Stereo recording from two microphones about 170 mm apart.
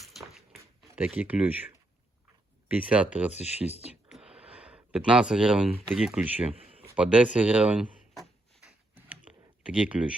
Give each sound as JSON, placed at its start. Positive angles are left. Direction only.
{"t": 0.0, "sound": "a sound", "side_deg": 0}
{"t": 0.9, "sound": "speech", "side_deg": -10}
{"t": 3.3, "sound": "speech", "side_deg": 40}
{"t": 4.1, "sound": "speech", "side_deg": -5}
{"t": 9.0, "sound": "a sound", "side_deg": -10}
{"t": 9.7, "sound": "speech", "side_deg": -5}